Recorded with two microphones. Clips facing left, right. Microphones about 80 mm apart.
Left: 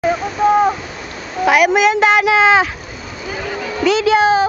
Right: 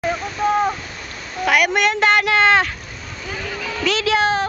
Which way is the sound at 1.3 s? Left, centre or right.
Centre.